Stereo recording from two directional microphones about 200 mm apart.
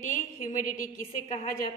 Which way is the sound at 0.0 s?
40° left (ahead or behind).